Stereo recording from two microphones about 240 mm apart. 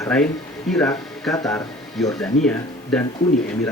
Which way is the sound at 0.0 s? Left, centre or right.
Centre.